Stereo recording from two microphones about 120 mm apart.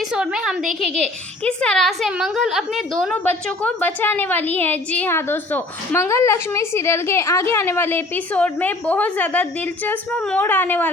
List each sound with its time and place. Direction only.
0.1 s a woman's voice: 5° right (ahead or behind)
1.5 s a woman's voice: 5° left (ahead or behind)
3.2 s a woman's voice: 15° left (ahead or behind)
10.4 s a woman's voice: 15° left (ahead or behind)